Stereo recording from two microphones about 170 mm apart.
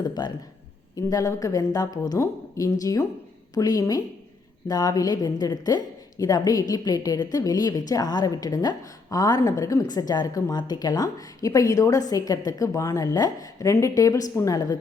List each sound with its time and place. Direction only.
0.0 s a woman's voice: 25° left (ahead or behind)